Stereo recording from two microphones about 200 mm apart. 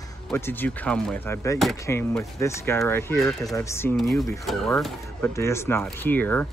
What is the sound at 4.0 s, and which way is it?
Speech, centre (ahead or behind).